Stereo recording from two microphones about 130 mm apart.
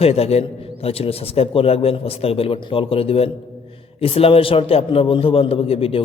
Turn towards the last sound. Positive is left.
turn(degrees=45)  # may be behind; listen again after turning